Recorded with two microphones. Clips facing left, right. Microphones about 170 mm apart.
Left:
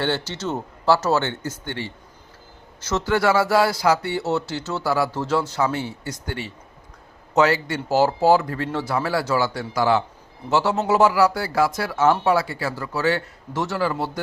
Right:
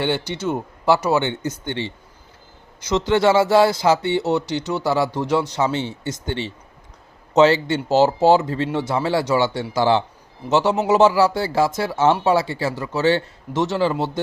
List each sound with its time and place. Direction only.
0.0 s speech: 15° right (ahead or behind)